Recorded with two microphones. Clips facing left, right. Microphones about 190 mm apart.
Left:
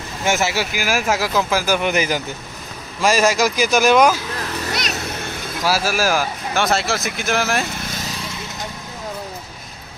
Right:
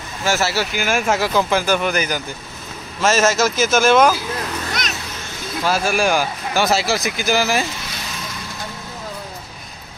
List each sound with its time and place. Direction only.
0.2 s speech: 20° left (ahead or behind)
1.9 s speech: 25° left (ahead or behind)
3.0 s speech: 10° left (ahead or behind)
5.6 s speech: 5° left (ahead or behind)